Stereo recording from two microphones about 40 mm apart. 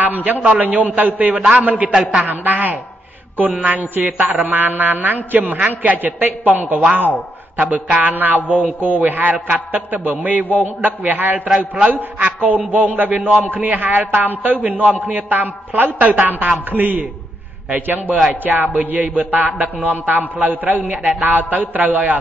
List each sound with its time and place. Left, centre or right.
0.0 s a man's voice: right
11.7 s a man's voice: right